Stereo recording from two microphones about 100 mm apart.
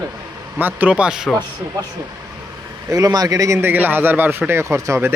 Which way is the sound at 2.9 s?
40° right (ahead or behind).